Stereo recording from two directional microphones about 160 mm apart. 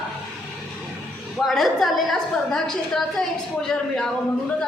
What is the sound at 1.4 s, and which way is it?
A woman's voice, centre (ahead or behind).